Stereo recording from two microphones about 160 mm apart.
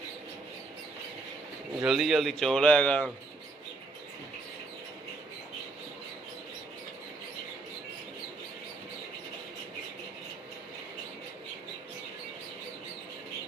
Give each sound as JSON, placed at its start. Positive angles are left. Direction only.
{"t": 1.8, "sound": "a man's voice", "side_deg": 0}